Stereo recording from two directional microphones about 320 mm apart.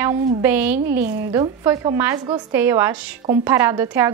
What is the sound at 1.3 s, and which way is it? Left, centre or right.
A woman's voice, centre.